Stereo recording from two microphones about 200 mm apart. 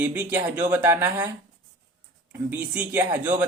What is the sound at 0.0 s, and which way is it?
Speech, 10° right (ahead or behind).